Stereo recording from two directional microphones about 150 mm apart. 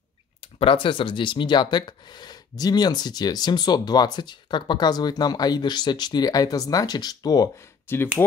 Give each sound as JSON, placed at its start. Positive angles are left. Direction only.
{"t": 0.6, "sound": "speech", "side_deg": 35}
{"t": 7.9, "sound": "speech", "side_deg": 15}